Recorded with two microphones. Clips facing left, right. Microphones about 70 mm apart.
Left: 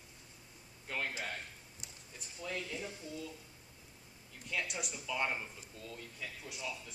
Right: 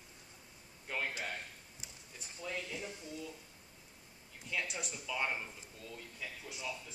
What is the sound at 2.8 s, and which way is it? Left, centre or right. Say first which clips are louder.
Speech: left 1 dB; left.